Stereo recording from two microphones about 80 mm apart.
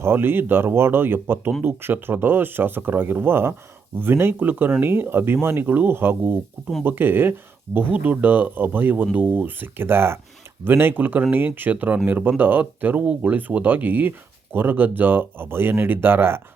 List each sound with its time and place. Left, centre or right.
0.0 s speech: right